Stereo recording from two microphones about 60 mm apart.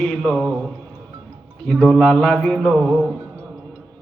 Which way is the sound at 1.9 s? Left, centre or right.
Centre.